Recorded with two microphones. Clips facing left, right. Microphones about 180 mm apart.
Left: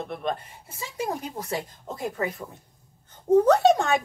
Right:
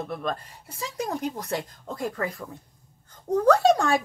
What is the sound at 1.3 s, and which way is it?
Speech, 25° left (ahead or behind).